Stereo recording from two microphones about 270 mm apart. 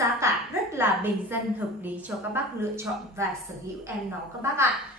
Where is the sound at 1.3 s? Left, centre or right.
Centre.